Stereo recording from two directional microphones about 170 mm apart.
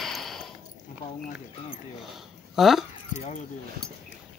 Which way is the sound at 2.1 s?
Centre (ahead or behind).